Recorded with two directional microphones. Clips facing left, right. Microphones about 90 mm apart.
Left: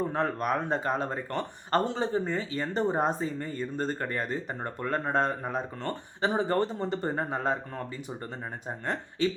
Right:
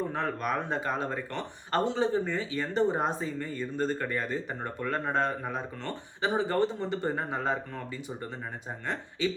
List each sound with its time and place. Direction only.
0.1 s speech: 40° left (ahead or behind)
8.9 s speech: 45° left (ahead or behind)